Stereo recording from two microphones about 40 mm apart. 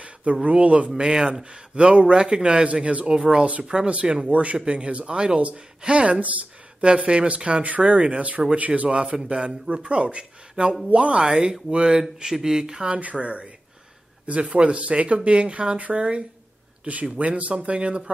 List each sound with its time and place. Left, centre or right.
0.0 s speech: right
1.0 s speech: centre
3.2 s speech: right
3.4 s speech: right
8.8 s speech: right
12.2 s speech: centre
12.9 s speech: right